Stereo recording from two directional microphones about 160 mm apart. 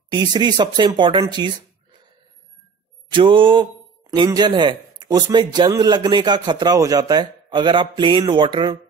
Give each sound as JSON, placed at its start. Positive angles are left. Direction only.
{"t": 0.1, "sound": "speech", "side_deg": -25}
{"t": 3.1, "sound": "mantra", "side_deg": -30}
{"t": 4.1, "sound": "speech", "side_deg": -30}